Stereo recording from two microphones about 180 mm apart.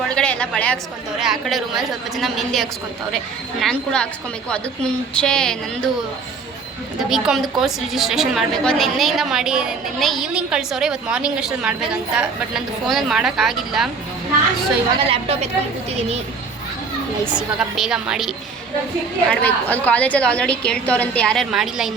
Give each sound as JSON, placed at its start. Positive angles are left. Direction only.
{"t": 0.1, "sound": "a sound", "side_deg": 5}
{"t": 1.2, "sound": "a woman's voice", "side_deg": 0}
{"t": 7.1, "sound": "a woman's voice", "side_deg": 0}
{"t": 15.0, "sound": "a woman's voice", "side_deg": -35}
{"t": 17.6, "sound": "a woman's voice", "side_deg": -5}
{"t": 19.3, "sound": "a woman's voice", "side_deg": 10}